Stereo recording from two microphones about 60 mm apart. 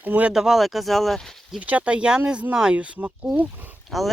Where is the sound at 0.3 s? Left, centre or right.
Centre.